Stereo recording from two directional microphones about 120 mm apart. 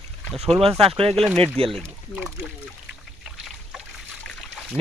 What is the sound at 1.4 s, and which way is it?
Speech, 50° right (ahead or behind).